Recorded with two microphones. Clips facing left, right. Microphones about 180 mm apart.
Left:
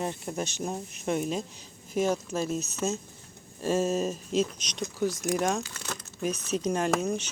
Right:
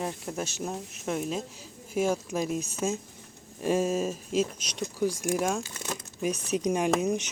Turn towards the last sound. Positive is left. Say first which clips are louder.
# right 1 dB
turn(degrees=-15)  # may be behind; listen again after turning